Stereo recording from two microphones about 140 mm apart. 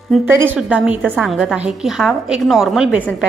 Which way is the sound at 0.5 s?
10° right (ahead or behind).